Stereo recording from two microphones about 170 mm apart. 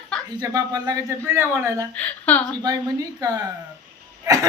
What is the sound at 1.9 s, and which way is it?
Speech, 10° left (ahead or behind).